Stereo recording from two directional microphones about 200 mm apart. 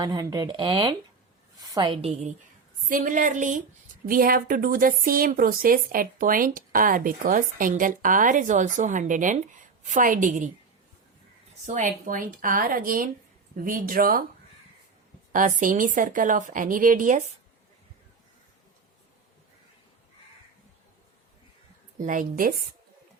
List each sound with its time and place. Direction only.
0.0 s a woman's voice: 20° right (ahead or behind); by 10.5 s 40° right (ahead or behind)
11.6 s speech: 40° right (ahead or behind)
15.3 s a woman's voice: 40° right (ahead or behind)
22.0 s a woman's voice: 40° right (ahead or behind)